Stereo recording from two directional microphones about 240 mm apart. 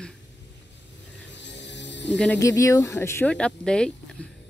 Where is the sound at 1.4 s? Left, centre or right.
Left.